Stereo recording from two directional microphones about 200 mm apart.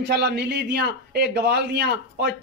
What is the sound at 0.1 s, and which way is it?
A man's voice, 55° right (ahead or behind).